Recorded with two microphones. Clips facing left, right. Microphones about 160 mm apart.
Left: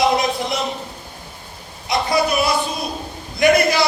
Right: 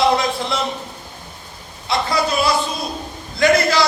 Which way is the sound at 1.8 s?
20° left (ahead or behind).